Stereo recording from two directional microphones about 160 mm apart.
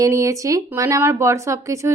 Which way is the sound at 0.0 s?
20° right (ahead or behind).